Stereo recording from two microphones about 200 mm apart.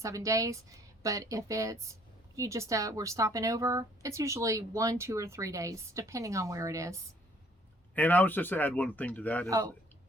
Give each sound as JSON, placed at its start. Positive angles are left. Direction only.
{"t": 0.0, "sound": "a woman's voice", "side_deg": -15}
{"t": 7.9, "sound": "speech", "side_deg": 10}
{"t": 9.5, "sound": "a woman's voice", "side_deg": -15}